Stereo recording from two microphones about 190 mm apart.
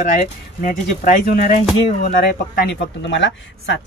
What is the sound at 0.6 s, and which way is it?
Speech, 45° left (ahead or behind).